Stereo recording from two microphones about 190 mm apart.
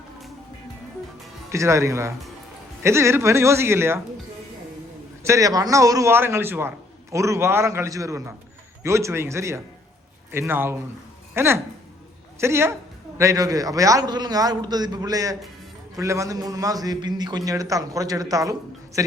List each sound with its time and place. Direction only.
1.5 s a man's voice: 15° right (ahead or behind)
5.2 s a man's voice: 15° right (ahead or behind)